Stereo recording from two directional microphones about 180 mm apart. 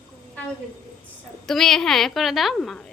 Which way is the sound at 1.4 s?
Centre (ahead or behind).